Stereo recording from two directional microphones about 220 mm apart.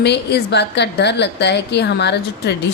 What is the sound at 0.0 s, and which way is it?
A woman's voice, 50° left (ahead or behind).